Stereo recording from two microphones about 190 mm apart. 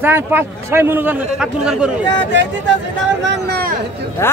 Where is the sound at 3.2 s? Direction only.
60° right (ahead or behind).